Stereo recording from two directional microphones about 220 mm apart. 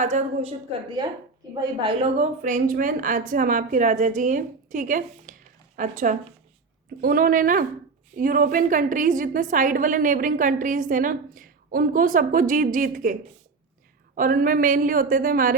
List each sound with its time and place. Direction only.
0.0 s a woman's voice: 30° right (ahead or behind)
14.2 s a woman's voice: 40° right (ahead or behind)